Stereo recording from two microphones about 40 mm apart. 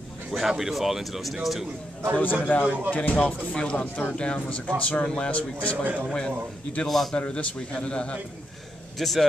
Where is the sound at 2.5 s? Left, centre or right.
Left.